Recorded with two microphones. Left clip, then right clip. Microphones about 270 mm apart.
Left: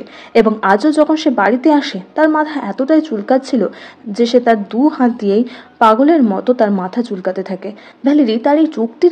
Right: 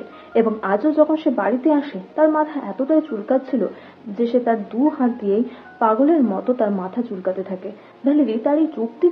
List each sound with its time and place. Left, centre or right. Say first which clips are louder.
0.3 s a woman's voice: left 7 dB; left